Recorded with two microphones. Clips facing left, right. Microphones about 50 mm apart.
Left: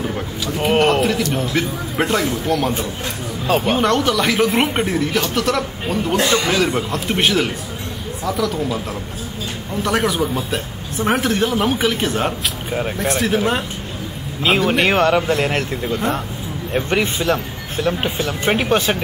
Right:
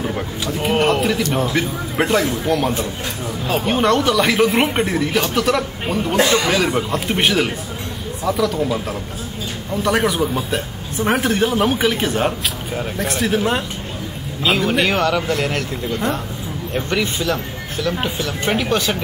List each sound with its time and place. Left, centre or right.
0.6 s a sound: centre
1.5 s speech: centre
3.7 s speech: centre
6.1 s speech: right
6.4 s speech: centre
9.8 s speech: centre
11.1 s speech: centre
14.4 s speech: centre